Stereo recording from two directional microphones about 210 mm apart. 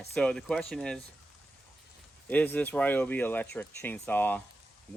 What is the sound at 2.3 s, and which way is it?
Speech, 10° left (ahead or behind).